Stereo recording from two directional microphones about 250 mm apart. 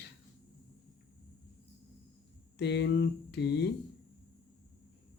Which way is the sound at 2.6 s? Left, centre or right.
Left.